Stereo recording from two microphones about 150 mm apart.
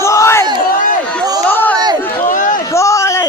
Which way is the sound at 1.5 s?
15° left (ahead or behind).